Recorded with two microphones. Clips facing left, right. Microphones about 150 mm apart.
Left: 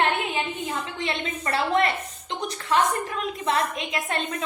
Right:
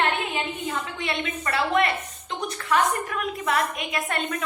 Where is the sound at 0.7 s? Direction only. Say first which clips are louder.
Even; 30° left (ahead or behind).